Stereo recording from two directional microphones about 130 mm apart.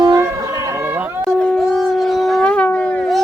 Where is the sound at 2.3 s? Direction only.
5° left (ahead or behind).